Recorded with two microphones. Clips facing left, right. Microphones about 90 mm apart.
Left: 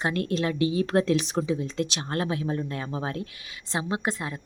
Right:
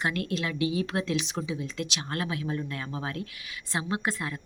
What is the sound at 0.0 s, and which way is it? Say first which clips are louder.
Speech: left 4 dB; 35° left (ahead or behind).